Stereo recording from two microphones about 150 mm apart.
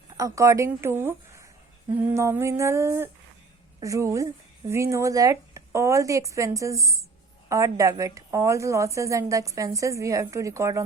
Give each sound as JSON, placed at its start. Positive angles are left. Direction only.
{"t": 0.2, "sound": "a woman's voice", "side_deg": -20}
{"t": 2.1, "sound": "music", "side_deg": -20}
{"t": 3.8, "sound": "a woman's voice", "side_deg": -20}